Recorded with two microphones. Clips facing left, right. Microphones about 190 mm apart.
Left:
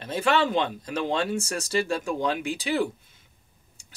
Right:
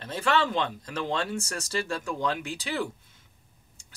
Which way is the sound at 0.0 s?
15° left (ahead or behind).